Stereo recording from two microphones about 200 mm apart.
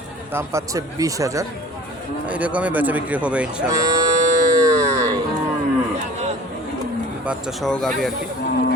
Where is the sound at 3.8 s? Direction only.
15° right (ahead or behind).